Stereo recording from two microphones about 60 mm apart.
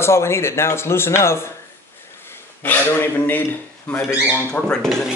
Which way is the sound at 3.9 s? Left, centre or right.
Left.